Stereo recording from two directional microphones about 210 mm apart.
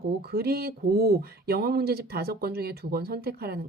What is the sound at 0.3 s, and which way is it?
Speech, 50° right (ahead or behind).